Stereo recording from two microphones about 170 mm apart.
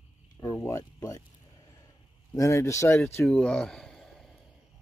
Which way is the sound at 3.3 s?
5° left (ahead or behind).